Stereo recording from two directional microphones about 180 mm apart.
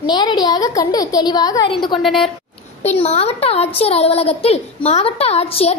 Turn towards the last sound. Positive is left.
turn(degrees=35)  # may be behind; listen again after turning